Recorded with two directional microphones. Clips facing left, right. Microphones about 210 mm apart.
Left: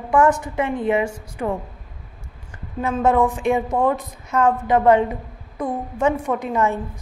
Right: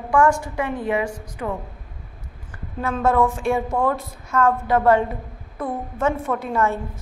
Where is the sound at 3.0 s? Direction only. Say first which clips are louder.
Left 1 dB; 15° left (ahead or behind).